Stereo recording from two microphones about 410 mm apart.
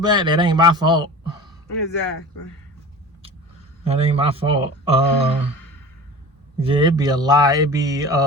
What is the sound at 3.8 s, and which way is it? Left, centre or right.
Speech, centre.